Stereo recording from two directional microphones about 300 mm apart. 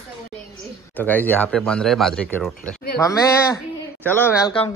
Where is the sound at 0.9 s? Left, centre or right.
Centre.